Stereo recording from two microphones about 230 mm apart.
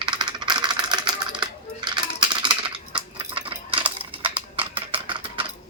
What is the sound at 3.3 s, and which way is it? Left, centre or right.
Coin, right.